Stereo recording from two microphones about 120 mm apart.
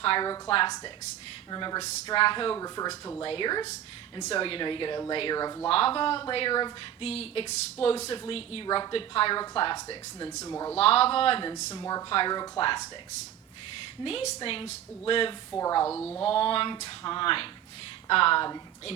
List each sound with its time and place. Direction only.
0.0 s a woman's voice: 45° left (ahead or behind)
2.6 s speech: 30° left (ahead or behind)
3.2 s speech: 40° left (ahead or behind)
4.3 s a woman's voice: 50° left (ahead or behind)
5.6 s a woman's voice: 50° left (ahead or behind)
7.0 s a woman's voice: 55° left (ahead or behind)
8.6 s speech: 35° left (ahead or behind)
8.9 s a woman's voice: 50° left (ahead or behind)
10.4 s speech: 25° left (ahead or behind)
10.8 s a woman's voice: 55° left (ahead or behind)
11.7 s speech: 30° left (ahead or behind)
14.0 s a woman's voice: 55° left (ahead or behind)
15.5 s speech: 25° left (ahead or behind)
16.2 s a woman's voice: 50° left (ahead or behind)